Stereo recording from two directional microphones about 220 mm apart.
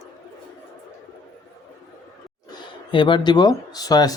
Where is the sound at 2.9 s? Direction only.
20° left (ahead or behind).